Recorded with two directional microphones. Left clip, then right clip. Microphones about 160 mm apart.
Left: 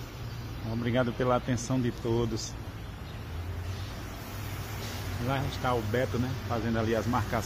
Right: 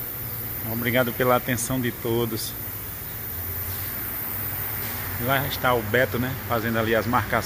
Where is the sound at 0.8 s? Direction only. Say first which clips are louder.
Right 7 dB; 10° right (ahead or behind).